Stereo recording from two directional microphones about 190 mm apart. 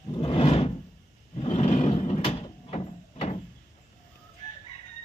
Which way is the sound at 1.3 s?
30° left (ahead or behind).